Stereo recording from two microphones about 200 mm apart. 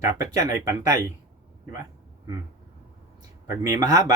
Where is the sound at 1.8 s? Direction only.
15° right (ahead or behind).